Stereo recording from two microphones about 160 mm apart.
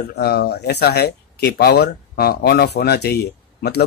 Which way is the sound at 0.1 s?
85° left.